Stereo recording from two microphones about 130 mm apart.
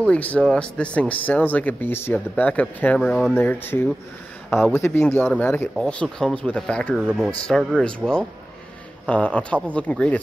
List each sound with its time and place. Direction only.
0.0 s speech: 10° left (ahead or behind)
3.3 s a man's voice: 15° left (ahead or behind)